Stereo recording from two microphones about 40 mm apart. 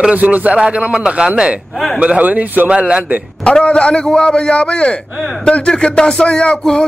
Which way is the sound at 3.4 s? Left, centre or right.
Left.